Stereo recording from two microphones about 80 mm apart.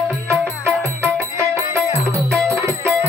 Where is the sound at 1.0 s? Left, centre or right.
Right.